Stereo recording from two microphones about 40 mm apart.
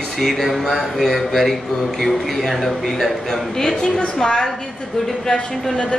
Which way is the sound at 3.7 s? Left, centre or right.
Left.